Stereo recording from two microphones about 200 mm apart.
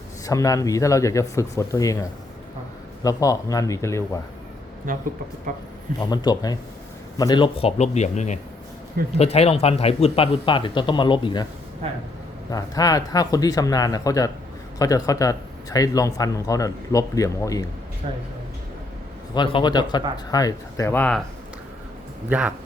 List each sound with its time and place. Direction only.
0.3 s speech: 15° left (ahead or behind)
4.9 s speech: 45° right (ahead or behind)
6.0 s a man's voice: 20° left (ahead or behind)
12.5 s speech: 20° left (ahead or behind)
19.3 s speech: 20° left (ahead or behind)
22.3 s speech: 5° right (ahead or behind)